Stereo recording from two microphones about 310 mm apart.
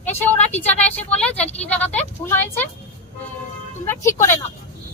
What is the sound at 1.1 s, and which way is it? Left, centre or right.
A woman's voice, centre.